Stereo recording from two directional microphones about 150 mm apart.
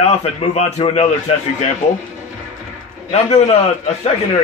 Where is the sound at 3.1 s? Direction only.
45° left (ahead or behind).